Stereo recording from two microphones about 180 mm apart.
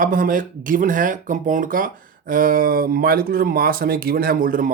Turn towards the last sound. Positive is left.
turn(degrees=-50)  # may be behind; listen again after turning